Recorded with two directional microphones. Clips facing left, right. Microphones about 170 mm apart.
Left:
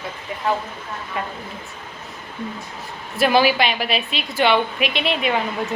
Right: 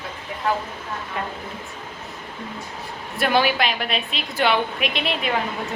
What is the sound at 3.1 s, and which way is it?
A woman's voice, 5° left (ahead or behind).